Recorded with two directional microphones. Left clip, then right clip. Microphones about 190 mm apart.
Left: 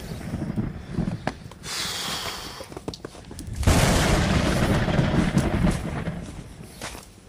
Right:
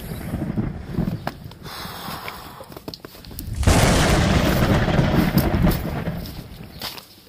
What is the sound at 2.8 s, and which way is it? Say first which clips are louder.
Horse: even; 35° right (ahead or behind).